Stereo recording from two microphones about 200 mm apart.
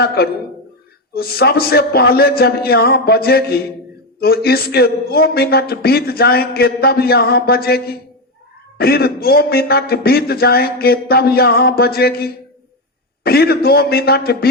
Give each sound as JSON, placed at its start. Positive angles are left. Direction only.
{"t": 0.0, "sound": "a man's voice", "side_deg": 55}